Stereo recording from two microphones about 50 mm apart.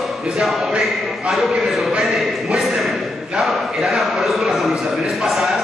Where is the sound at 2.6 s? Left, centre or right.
Centre.